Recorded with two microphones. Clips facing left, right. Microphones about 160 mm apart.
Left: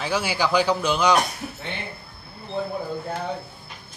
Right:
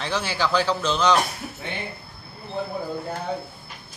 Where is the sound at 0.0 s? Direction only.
10° left (ahead or behind).